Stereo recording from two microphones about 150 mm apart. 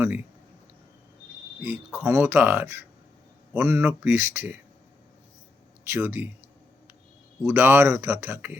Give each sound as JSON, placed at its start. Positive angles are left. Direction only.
{"t": 1.6, "sound": "speech", "side_deg": -15}
{"t": 5.9, "sound": "speech", "side_deg": -15}
{"t": 7.4, "sound": "speech", "side_deg": -15}